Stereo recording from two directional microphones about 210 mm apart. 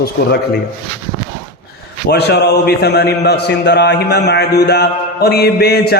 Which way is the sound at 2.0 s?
50° left (ahead or behind).